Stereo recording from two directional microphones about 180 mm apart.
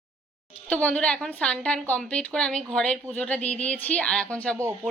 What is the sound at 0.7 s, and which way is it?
A woman's voice, 10° left (ahead or behind).